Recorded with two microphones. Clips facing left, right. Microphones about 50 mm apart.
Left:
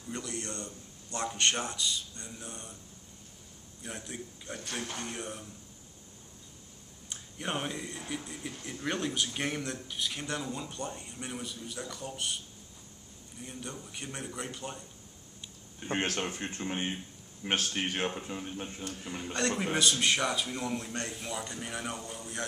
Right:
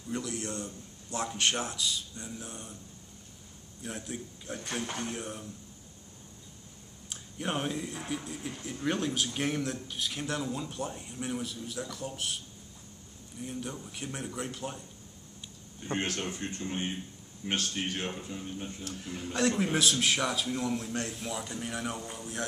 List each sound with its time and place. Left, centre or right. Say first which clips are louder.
0.1 s speech: right 3 dB; centre
3.8 s speech: right 2 dB; centre
7.1 s speech: right 1 dB; centre
13.4 s speech: right 4 dB; centre
15.8 s a man's voice: left 1 dB; left
18.9 s speech: even; centre